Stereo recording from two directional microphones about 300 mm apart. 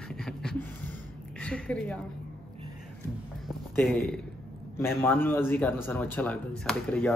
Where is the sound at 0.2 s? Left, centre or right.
Centre.